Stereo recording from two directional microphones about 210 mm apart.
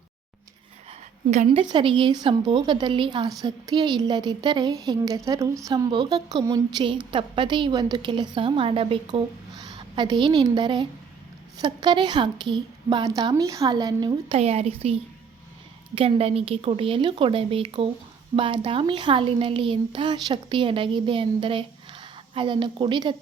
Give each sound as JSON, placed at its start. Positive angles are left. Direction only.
{"t": 0.9, "sound": "a woman's voice", "side_deg": -30}
{"t": 14.3, "sound": "a woman's voice", "side_deg": -30}